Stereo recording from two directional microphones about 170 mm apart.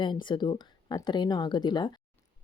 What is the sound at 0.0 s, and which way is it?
Speech, 25° left (ahead or behind).